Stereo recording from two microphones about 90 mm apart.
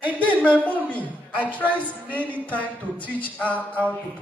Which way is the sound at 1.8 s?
15° left (ahead or behind).